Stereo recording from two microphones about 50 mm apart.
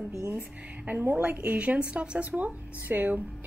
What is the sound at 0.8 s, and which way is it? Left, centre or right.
Speech, right.